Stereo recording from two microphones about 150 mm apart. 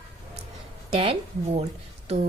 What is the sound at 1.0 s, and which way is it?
Speech, 45° right (ahead or behind).